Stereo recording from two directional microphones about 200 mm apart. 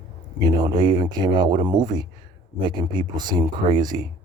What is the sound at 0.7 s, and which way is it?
Speech, 20° right (ahead or behind).